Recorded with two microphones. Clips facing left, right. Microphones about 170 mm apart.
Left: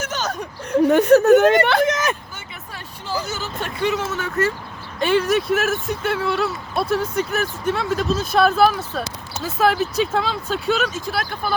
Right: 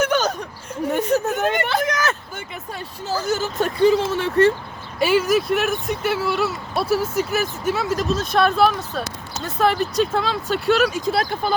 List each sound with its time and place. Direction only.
0.1 s a sound: 60° right (ahead or behind)
0.7 s speech: 75° left (ahead or behind)
1.8 s vehicle: 25° left (ahead or behind)
3.3 s speech: 45° right (ahead or behind)
4.9 s speech: 5° right (ahead or behind)
10.9 s speech: 25° right (ahead or behind)